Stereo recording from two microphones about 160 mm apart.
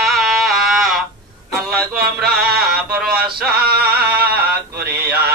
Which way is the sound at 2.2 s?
75° right (ahead or behind).